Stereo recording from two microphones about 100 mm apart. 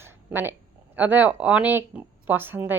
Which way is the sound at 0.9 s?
15° right (ahead or behind).